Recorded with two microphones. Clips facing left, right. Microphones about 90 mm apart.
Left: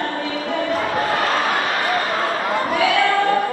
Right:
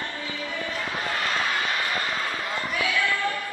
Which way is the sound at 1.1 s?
60° left (ahead or behind).